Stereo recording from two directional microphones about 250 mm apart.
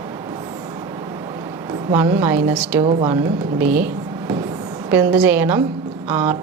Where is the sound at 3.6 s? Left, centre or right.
Right.